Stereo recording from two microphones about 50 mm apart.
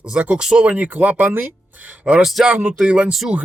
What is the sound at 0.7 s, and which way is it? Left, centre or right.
Speech, right.